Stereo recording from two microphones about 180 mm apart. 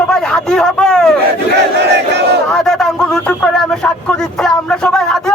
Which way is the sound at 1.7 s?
70° right (ahead or behind).